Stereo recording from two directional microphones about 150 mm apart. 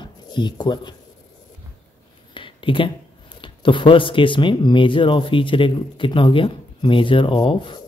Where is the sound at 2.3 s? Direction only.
35° left (ahead or behind).